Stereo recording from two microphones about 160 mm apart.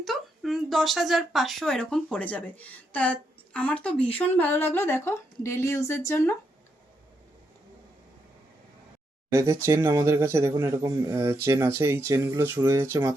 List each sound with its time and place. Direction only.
0.0 s speech: centre (ahead or behind); by 6.3 s 15° left (ahead or behind)
9.3 s speech: 20° right (ahead or behind)